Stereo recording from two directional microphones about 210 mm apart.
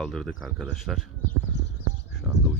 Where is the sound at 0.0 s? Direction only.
5° left (ahead or behind).